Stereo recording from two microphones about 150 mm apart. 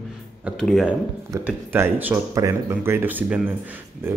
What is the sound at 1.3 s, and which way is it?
Speech, 15° right (ahead or behind).